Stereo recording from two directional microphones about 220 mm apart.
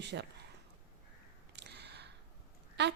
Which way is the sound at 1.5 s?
50° right (ahead or behind).